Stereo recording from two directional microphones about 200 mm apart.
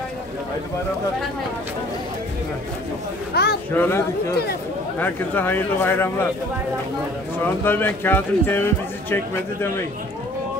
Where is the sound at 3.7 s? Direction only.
10° left (ahead or behind).